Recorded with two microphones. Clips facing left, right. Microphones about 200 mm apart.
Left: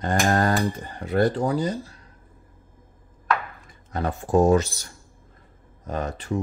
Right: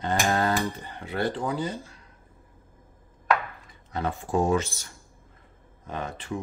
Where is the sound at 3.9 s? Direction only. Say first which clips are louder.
Left 5 dB; 40° left (ahead or behind).